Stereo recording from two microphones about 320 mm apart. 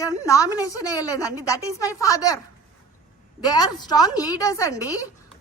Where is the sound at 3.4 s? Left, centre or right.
Centre.